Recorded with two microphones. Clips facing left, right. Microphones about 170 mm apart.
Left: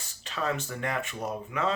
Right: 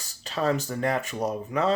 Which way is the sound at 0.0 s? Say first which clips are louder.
Right 6 dB; 35° right (ahead or behind).